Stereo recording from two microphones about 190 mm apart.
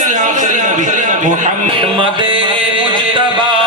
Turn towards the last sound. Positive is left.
turn(degrees=-25)  # may be behind; listen again after turning